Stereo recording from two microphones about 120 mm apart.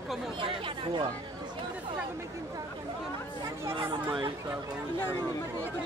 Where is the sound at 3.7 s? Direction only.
45° right (ahead or behind).